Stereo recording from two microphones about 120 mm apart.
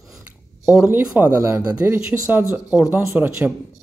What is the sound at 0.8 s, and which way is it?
Speech, 10° right (ahead or behind).